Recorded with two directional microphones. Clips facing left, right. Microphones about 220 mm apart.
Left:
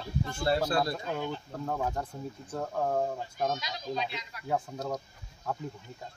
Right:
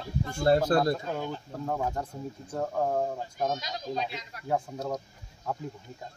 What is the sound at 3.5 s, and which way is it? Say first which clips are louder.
Speech: right 1 dB; 45° right (ahead or behind).